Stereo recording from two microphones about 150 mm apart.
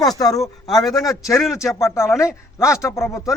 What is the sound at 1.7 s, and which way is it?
Speech, 20° left (ahead or behind).